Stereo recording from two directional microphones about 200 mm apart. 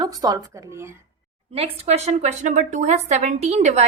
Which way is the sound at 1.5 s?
30° right (ahead or behind).